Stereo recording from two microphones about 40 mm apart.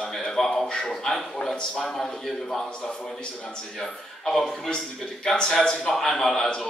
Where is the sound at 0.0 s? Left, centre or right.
Centre.